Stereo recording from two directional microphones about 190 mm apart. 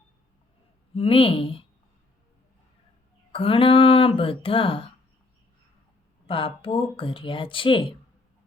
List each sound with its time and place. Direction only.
0.9 s speech: 30° left (ahead or behind)
3.3 s speech: 30° left (ahead or behind)
6.2 s speech: 30° left (ahead or behind)